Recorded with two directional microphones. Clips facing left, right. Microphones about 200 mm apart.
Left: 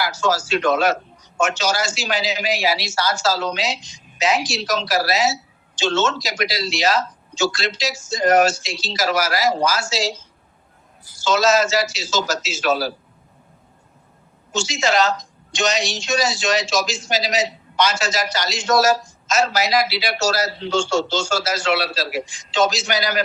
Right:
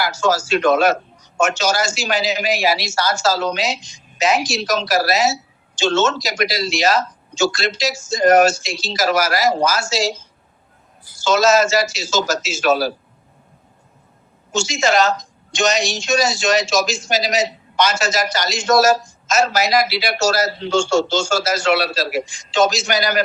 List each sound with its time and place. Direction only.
0.0 s a woman's voice: 45° right (ahead or behind)
11.2 s a woman's voice: 45° right (ahead or behind)
14.5 s a woman's voice: 45° right (ahead or behind)